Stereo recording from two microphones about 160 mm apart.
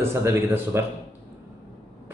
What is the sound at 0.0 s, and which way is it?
Speech, 15° right (ahead or behind).